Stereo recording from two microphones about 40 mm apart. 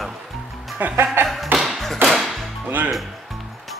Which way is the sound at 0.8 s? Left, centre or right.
Right.